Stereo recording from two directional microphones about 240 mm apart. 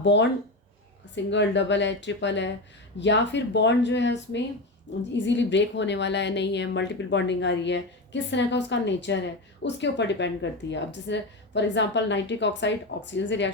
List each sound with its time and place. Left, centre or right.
0.0 s a woman's voice: left